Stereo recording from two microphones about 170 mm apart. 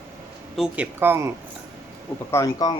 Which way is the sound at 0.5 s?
5° right (ahead or behind).